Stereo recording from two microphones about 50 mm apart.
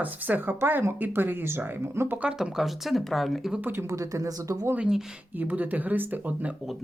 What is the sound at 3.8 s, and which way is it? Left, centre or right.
Speech, right.